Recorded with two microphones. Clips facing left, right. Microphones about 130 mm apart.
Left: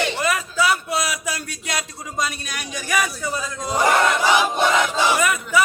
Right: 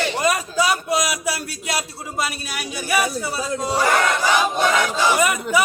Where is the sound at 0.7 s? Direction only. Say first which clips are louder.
Right 2 dB; 15° right (ahead or behind).